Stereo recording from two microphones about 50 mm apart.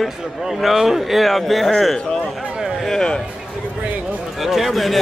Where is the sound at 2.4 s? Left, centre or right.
Centre.